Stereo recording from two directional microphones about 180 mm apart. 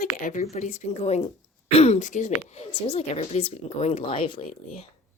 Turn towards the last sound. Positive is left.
turn(degrees=35)  # may be behind; listen again after turning